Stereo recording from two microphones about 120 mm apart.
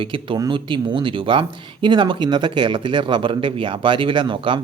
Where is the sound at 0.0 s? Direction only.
45° right (ahead or behind).